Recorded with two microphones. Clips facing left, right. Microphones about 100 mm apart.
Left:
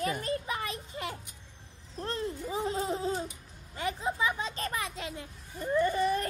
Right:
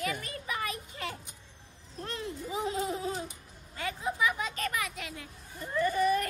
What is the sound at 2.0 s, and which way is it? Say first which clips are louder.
Speech: left 3 dB; 35° left (ahead or behind).